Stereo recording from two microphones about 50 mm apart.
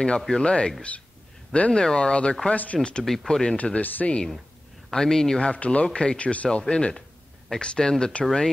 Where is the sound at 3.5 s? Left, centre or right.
Left.